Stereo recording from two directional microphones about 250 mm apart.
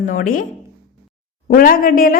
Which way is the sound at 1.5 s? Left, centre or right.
Left.